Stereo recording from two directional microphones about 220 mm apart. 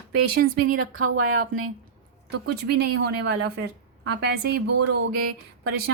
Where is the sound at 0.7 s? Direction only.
85° right.